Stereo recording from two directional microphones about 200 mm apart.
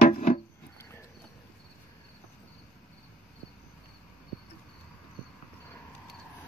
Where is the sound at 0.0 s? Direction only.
40° left (ahead or behind).